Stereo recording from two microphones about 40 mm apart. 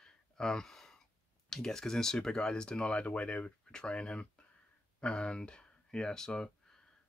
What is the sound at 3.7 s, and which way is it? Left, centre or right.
Speech, left.